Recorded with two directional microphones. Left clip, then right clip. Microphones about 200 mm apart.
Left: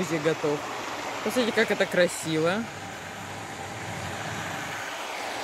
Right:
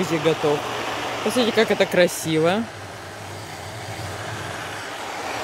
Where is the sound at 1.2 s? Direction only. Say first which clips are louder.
Right 5 dB; 5° right (ahead or behind).